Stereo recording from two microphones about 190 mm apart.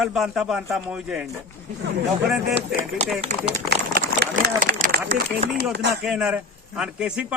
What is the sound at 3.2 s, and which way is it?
Speech, 40° right (ahead or behind).